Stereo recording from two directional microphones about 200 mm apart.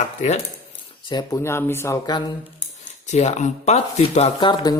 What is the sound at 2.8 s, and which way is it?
Speech, 35° left (ahead or behind).